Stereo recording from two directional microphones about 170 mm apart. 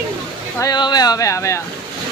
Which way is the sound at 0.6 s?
25° left (ahead or behind).